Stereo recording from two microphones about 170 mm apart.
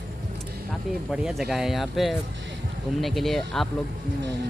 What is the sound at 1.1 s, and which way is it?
Speech, centre (ahead or behind).